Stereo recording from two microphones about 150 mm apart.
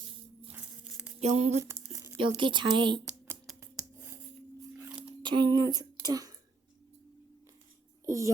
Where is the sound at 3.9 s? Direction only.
15° right (ahead or behind).